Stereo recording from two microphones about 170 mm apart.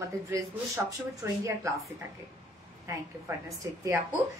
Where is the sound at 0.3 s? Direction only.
20° right (ahead or behind).